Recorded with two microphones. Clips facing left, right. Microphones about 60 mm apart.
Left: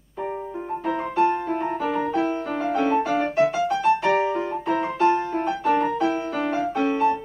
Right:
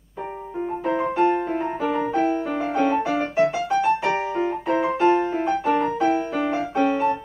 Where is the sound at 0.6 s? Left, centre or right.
Centre.